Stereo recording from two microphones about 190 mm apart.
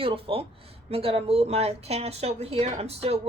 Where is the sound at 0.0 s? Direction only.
30° right (ahead or behind).